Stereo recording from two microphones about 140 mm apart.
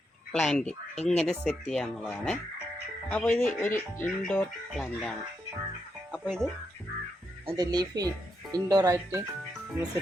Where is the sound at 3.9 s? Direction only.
15° left (ahead or behind).